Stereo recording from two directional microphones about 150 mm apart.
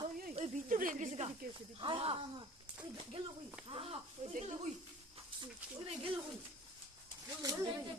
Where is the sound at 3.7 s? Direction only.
40° right (ahead or behind).